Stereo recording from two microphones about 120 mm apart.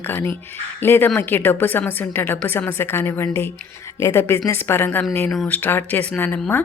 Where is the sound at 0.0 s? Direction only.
20° left (ahead or behind).